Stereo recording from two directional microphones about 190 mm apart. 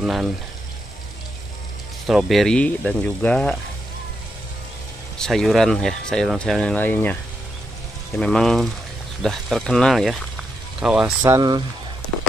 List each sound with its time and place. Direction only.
0.0 s speech: 5° right (ahead or behind)
2.0 s speech: centre (ahead or behind)
5.2 s speech: centre (ahead or behind)
8.2 s speech: 5° left (ahead or behind)
11.2 s speech: 20° right (ahead or behind)